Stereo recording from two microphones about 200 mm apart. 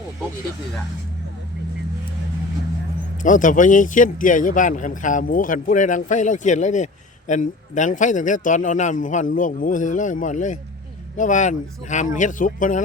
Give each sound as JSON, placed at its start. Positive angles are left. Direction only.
{"t": 3.2, "sound": "speech", "side_deg": 40}